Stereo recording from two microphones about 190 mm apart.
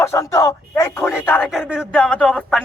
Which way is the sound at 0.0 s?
15° left (ahead or behind).